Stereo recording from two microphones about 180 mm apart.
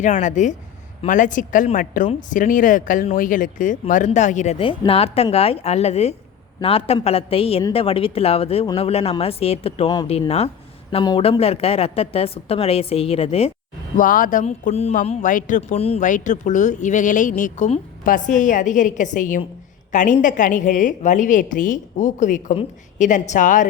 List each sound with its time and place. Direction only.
0.0 s speech: 45° left (ahead or behind)
13.9 s speech: 50° left (ahead or behind)